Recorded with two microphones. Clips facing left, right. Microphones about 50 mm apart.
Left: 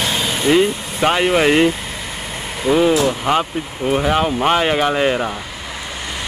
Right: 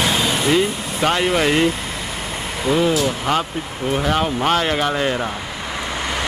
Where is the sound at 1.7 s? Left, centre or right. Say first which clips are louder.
Right 1 dB; centre.